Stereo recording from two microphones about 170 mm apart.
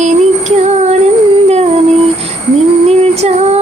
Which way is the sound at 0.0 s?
40° right (ahead or behind).